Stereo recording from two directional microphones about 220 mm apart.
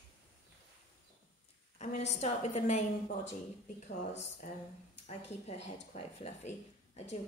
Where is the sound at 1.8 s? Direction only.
30° left (ahead or behind).